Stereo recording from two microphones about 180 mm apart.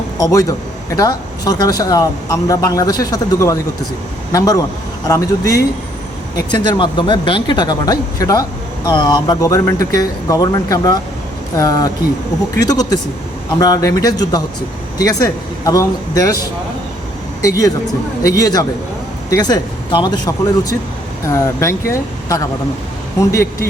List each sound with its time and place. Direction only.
0.2 s a man's voice: 20° left (ahead or behind)
18.2 s speech: 20° left (ahead or behind)